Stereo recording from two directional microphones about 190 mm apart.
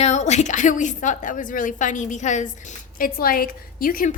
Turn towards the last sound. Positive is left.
turn(degrees=45)  # may be behind; listen again after turning